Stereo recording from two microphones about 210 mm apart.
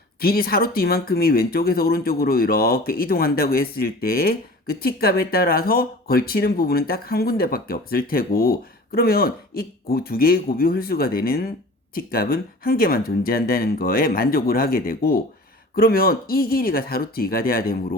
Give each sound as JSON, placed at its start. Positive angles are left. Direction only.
{"t": 0.2, "sound": "speech", "side_deg": 45}